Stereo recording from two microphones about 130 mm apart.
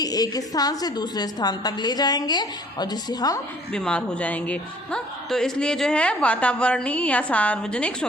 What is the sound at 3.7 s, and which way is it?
Speech, 10° left (ahead or behind).